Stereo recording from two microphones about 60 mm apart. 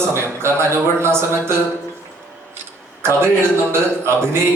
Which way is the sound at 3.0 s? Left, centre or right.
Right.